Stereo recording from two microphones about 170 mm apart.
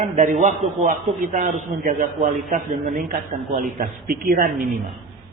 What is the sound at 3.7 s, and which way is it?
Speech, 55° right (ahead or behind).